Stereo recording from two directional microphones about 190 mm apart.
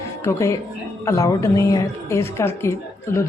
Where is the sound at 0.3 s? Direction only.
15° left (ahead or behind).